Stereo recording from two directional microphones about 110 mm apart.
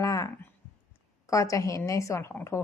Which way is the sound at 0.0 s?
30° left (ahead or behind).